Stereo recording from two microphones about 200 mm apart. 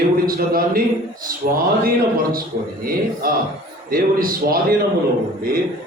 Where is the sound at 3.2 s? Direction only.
45° right (ahead or behind).